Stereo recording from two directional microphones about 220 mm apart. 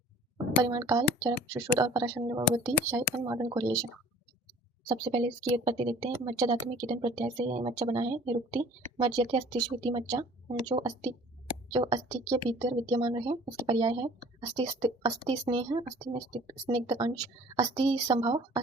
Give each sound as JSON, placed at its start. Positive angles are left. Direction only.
{"t": 0.6, "sound": "speech", "side_deg": -15}
{"t": 4.9, "sound": "speech", "side_deg": -20}